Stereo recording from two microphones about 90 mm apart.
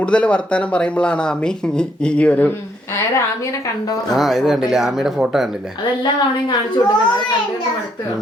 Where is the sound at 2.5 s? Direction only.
30° left (ahead or behind).